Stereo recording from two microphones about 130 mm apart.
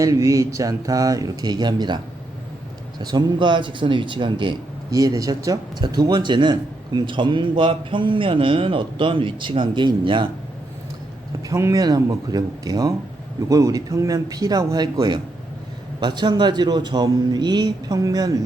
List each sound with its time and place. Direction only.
0.0 s speech: 25° right (ahead or behind)
3.0 s speech: 30° right (ahead or behind)
11.4 s speech: 25° right (ahead or behind)